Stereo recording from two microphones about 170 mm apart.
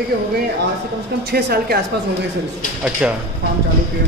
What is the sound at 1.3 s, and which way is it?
Speech, 65° right (ahead or behind).